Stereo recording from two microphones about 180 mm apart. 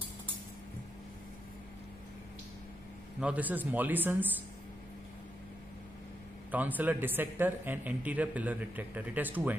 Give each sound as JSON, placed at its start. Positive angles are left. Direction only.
{"t": 3.2, "sound": "a man's voice", "side_deg": -10}
{"t": 6.5, "sound": "a man's voice", "side_deg": -10}